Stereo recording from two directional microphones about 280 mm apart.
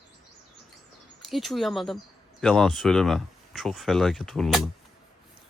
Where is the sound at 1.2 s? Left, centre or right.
Centre.